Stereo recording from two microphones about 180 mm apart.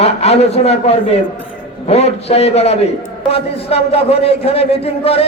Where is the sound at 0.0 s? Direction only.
35° left (ahead or behind).